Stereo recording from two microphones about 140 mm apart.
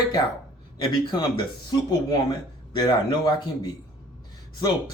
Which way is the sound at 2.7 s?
30° left (ahead or behind).